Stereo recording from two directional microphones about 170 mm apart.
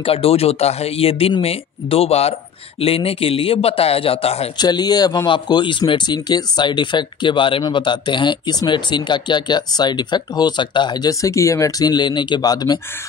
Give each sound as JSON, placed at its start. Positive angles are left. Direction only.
{"t": 0.0, "sound": "speech", "side_deg": 35}
{"t": 4.6, "sound": "speech", "side_deg": 25}